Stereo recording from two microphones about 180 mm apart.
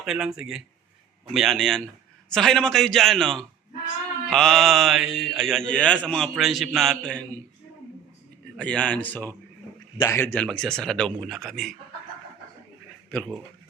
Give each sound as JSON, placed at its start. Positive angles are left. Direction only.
{"t": 0.0, "sound": "speech", "side_deg": -5}
{"t": 8.5, "sound": "speech", "side_deg": 5}
{"t": 10.3, "sound": "speech", "side_deg": 5}
{"t": 13.1, "sound": "speech", "side_deg": 5}